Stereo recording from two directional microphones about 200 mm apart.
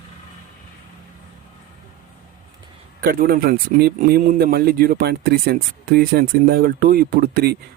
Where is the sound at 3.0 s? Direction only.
45° right (ahead or behind).